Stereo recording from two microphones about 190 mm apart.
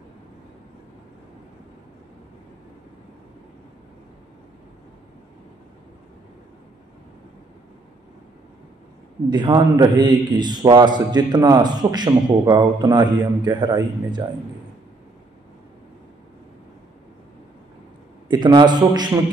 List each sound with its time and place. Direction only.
9.3 s a man's voice: 20° right (ahead or behind)
18.3 s a man's voice: 25° right (ahead or behind)